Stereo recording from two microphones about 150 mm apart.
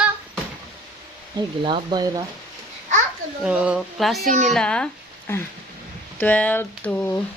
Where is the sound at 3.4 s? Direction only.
5° right (ahead or behind).